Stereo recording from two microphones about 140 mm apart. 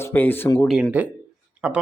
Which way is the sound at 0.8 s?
10° right (ahead or behind).